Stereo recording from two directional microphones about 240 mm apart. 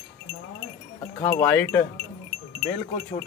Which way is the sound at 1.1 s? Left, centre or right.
Centre.